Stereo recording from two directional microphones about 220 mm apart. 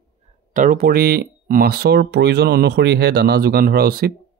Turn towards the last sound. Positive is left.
turn(degrees=-45)  # may be behind; listen again after turning